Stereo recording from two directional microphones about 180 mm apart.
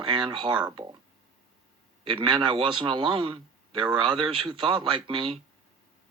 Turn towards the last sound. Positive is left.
turn(degrees=-30)  # may be behind; listen again after turning